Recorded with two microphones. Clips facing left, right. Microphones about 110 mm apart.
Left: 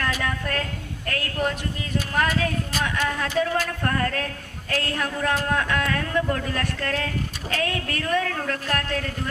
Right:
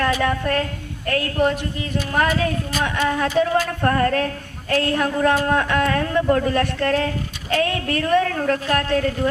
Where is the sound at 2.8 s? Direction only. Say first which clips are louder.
Right 6 dB; 40° right (ahead or behind).